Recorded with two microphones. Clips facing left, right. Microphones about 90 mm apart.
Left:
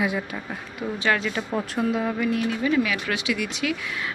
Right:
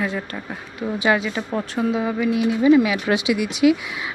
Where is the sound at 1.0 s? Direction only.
10° right (ahead or behind).